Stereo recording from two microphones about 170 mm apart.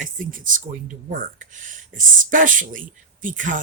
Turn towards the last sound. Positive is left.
turn(degrees=-50)  # may be behind; listen again after turning